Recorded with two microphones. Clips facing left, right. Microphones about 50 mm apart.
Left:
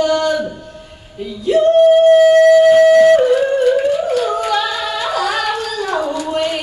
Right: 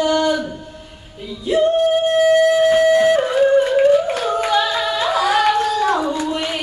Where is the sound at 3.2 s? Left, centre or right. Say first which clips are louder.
Left 2 dB; right.